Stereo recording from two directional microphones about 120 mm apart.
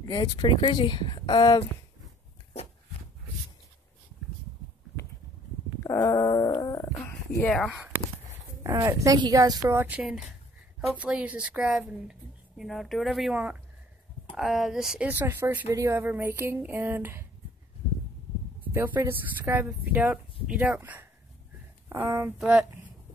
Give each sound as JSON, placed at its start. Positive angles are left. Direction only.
{"t": 0.1, "sound": "speech", "side_deg": 35}
{"t": 5.9, "sound": "dog", "side_deg": 30}
{"t": 7.4, "sound": "speech", "side_deg": 5}
{"t": 8.8, "sound": "speech", "side_deg": -30}
{"t": 18.7, "sound": "speech", "side_deg": -20}
{"t": 22.4, "sound": "speech", "side_deg": -5}